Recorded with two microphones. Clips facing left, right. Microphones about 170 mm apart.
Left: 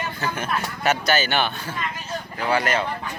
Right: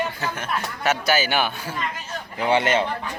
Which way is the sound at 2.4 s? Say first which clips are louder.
Right 3 dB; 25° right (ahead or behind).